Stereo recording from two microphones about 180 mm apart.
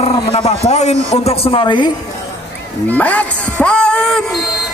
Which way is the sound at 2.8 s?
10° left (ahead or behind).